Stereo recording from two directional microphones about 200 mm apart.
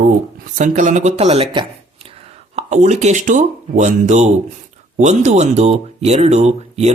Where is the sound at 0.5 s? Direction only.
40° right (ahead or behind).